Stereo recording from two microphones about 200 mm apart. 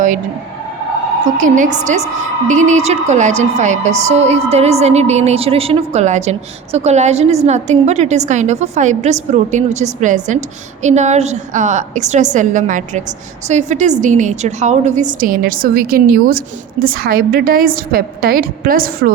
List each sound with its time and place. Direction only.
1.4 s a woman's voice: 40° right (ahead or behind)